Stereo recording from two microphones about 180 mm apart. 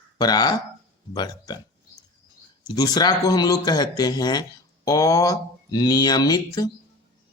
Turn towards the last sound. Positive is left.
turn(degrees=20)  # may be behind; listen again after turning